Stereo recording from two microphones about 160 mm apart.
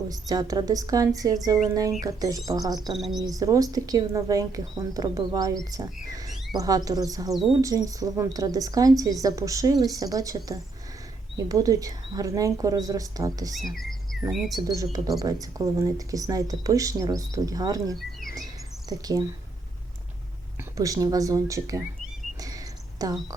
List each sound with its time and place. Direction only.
0.1 s a woman's voice: 25° right (ahead or behind)
14.1 s chirp: centre (ahead or behind)
14.5 s a woman's voice: 25° right (ahead or behind)
20.7 s a woman's voice: 20° right (ahead or behind)
23.0 s a woman's voice: 20° right (ahead or behind)